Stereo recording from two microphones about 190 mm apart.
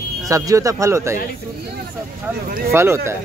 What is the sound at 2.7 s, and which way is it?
Speech, 15° right (ahead or behind).